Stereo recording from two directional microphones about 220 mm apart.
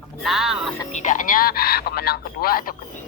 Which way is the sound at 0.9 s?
35° left (ahead or behind).